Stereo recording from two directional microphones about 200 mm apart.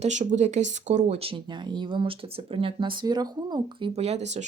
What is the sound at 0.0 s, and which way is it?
Speech, 35° right (ahead or behind).